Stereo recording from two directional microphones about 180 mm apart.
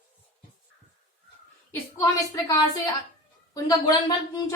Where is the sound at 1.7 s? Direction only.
15° left (ahead or behind).